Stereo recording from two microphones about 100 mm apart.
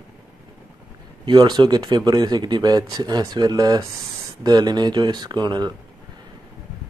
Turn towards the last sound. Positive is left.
turn(degrees=-45)  # may be behind; listen again after turning